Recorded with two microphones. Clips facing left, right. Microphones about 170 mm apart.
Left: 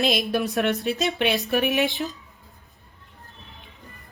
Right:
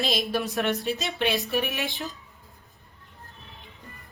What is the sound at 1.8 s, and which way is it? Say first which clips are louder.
Speech: left 8 dB; 20° left (ahead or behind).